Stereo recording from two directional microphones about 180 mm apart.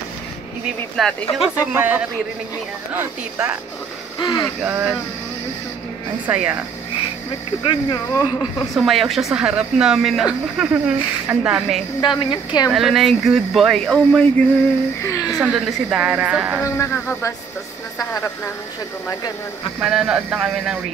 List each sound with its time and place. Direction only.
0.9 s a woman's voice: centre (ahead or behind)
1.6 s speech: 10° right (ahead or behind)
4.2 s speech: 25° left (ahead or behind)
4.6 s speech: 5° right (ahead or behind)
6.2 s speech: 10° right (ahead or behind)
7.6 s speech: 25° left (ahead or behind)
8.7 s a woman's voice: centre (ahead or behind)
12.0 s speech: 25° left (ahead or behind)
12.7 s a woman's voice: centre (ahead or behind)
15.0 s speech: 20° left (ahead or behind)
15.3 s a woman's voice: 5° right (ahead or behind)
16.6 s a man's voice: 15° left (ahead or behind)
19.8 s a woman's voice: 5° right (ahead or behind)